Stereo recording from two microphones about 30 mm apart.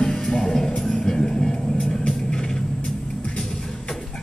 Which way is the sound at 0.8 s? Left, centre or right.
Left.